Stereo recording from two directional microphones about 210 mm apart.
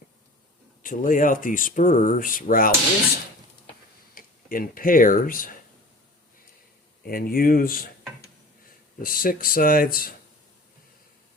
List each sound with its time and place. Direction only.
0.8 s speech: 40° left (ahead or behind)
4.1 s speech: 40° left (ahead or behind)
7.0 s speech: 45° left (ahead or behind)
9.0 s speech: 45° left (ahead or behind)